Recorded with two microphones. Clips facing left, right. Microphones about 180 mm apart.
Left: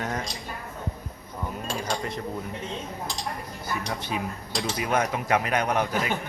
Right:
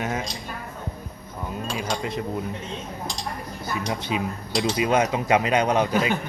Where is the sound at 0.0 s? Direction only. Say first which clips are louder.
Right 3 dB; 5° right (ahead or behind).